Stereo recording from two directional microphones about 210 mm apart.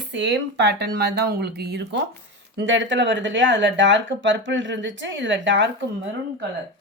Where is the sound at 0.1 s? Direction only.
55° right (ahead or behind).